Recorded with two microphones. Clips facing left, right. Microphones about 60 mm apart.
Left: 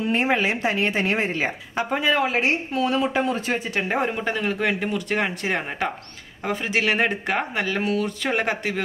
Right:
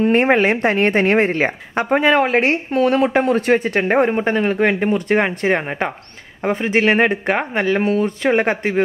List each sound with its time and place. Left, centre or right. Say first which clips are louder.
0.0 s a woman's voice: right 7 dB; right